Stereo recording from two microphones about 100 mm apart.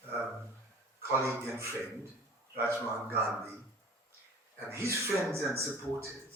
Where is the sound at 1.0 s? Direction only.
30° right (ahead or behind).